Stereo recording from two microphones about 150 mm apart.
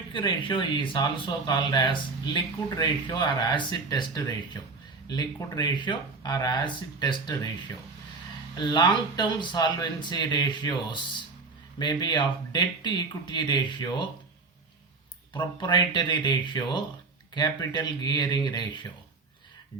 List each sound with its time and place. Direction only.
0.1 s speech: 30° left (ahead or behind)
8.5 s speech: 30° left (ahead or behind)
11.8 s speech: 30° left (ahead or behind)
15.6 s speech: 30° left (ahead or behind)